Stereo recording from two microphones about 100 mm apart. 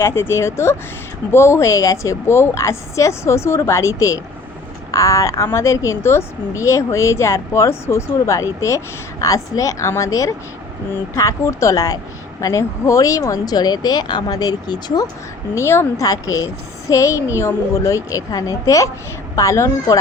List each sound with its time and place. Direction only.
0.0 s speech: 25° left (ahead or behind); by 15.0 s 40° left (ahead or behind)
15.5 s speech: 25° left (ahead or behind)
16.0 s speech: 35° left (ahead or behind)